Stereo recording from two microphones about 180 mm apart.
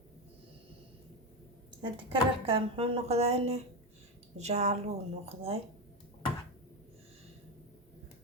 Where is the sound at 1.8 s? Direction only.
30° right (ahead or behind).